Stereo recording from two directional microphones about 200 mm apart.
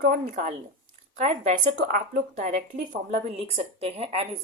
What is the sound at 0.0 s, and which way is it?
A woman's voice, 40° right (ahead or behind).